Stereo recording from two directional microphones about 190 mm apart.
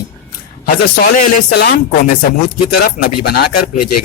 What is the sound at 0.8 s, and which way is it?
Speech, 55° left (ahead or behind).